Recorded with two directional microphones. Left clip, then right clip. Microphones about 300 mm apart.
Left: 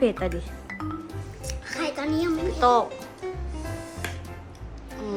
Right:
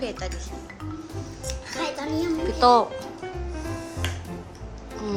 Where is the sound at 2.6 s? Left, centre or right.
Centre.